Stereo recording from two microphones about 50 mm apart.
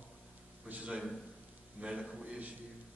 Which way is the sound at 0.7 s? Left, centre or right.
Right.